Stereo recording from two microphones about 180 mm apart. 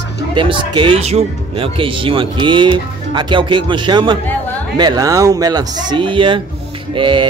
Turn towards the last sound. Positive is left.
turn(degrees=-30)  # may be behind; listen again after turning